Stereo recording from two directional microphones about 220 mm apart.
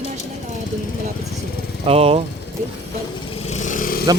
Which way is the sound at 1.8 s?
25° right (ahead or behind).